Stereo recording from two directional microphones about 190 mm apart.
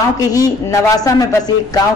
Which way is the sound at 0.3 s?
20° left (ahead or behind).